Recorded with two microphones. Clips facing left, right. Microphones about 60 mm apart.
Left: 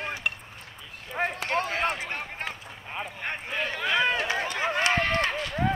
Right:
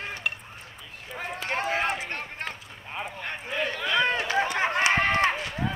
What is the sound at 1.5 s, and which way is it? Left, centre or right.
Speech, centre.